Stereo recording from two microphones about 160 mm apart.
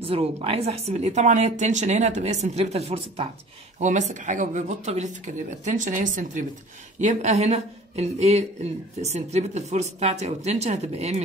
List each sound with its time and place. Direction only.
0.0 s a woman's voice: 35° right (ahead or behind)
3.8 s a woman's voice: 50° right (ahead or behind)